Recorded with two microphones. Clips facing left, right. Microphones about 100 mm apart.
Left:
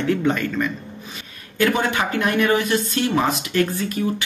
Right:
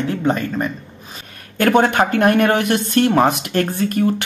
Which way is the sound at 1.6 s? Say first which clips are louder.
Right 6 dB; 55° right (ahead or behind).